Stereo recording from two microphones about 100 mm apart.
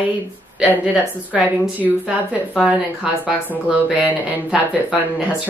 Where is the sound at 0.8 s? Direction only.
15° right (ahead or behind).